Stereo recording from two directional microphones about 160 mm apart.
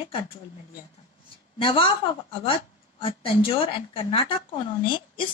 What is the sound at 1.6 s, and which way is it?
Speech, 35° left (ahead or behind).